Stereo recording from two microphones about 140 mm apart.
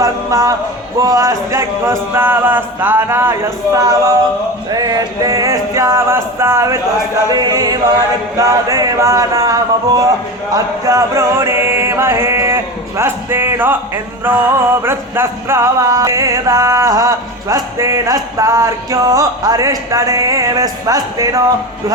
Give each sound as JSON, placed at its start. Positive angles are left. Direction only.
{"t": 0.0, "sound": "speech", "side_deg": -25}
{"t": 1.0, "sound": "chant", "side_deg": -25}
{"t": 4.7, "sound": "music", "side_deg": -30}
{"t": 10.5, "sound": "chant", "side_deg": -25}
{"t": 14.8, "sound": "music", "side_deg": -15}